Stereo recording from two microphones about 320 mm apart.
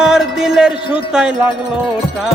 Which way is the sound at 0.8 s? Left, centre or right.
Centre.